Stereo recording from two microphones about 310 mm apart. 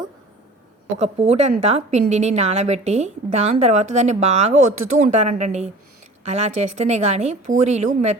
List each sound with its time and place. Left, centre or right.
0.9 s a woman's voice: right